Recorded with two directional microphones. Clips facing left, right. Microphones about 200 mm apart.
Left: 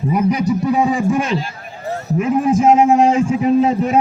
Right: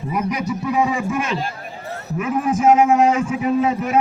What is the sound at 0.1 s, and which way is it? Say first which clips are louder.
A man's voice: left 6 dB; 30° left (ahead or behind).